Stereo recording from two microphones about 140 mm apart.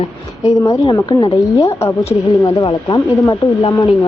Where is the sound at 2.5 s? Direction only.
35° left (ahead or behind).